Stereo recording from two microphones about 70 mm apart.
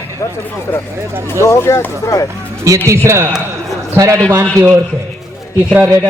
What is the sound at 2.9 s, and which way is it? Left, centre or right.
Speech, right.